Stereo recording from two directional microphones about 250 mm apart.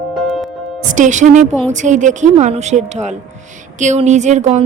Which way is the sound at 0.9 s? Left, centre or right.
Right.